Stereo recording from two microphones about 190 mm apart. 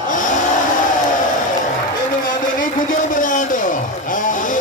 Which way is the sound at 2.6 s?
45° left (ahead or behind).